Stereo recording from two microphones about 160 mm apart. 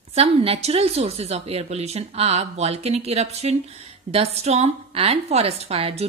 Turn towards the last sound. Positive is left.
turn(degrees=-40)  # may be behind; listen again after turning